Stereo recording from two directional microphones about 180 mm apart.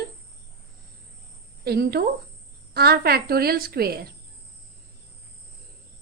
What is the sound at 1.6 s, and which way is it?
Speech, 65° right (ahead or behind).